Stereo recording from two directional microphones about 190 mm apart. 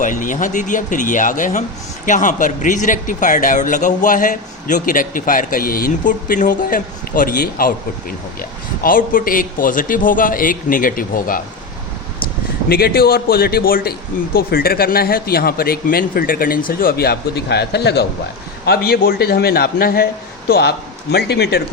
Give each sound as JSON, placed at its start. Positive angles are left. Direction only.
{"t": 0.0, "sound": "speech", "side_deg": 40}
{"t": 12.6, "sound": "speech", "side_deg": 55}